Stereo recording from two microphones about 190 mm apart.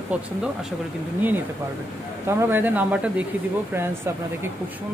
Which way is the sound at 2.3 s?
10° right (ahead or behind).